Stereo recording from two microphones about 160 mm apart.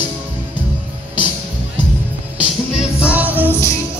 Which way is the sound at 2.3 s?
10° right (ahead or behind).